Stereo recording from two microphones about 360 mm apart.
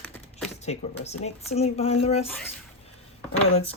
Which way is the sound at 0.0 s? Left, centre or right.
Centre.